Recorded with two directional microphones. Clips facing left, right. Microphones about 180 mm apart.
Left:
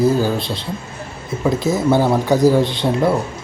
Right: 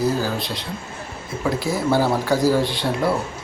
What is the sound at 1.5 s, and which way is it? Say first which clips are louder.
Speech: left 5 dB; 20° left (ahead or behind).